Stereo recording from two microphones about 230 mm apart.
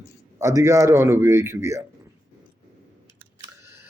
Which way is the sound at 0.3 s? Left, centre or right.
Centre.